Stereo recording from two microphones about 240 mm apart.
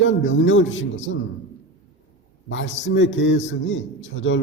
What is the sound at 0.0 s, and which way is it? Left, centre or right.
A man's voice, left.